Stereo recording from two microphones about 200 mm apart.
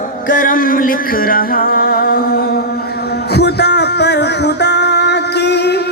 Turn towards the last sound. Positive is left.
turn(degrees=55)  # may be behind; listen again after turning